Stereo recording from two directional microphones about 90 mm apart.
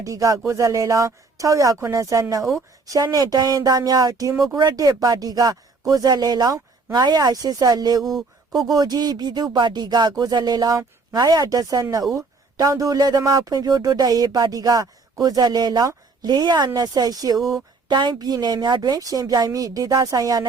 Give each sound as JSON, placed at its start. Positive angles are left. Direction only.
{"t": 0.0, "sound": "speech", "side_deg": -35}
{"t": 4.5, "sound": "speech", "side_deg": -55}
{"t": 8.0, "sound": "a sound", "side_deg": 0}
{"t": 8.7, "sound": "speech", "side_deg": -45}
{"t": 17.8, "sound": "speech", "side_deg": -55}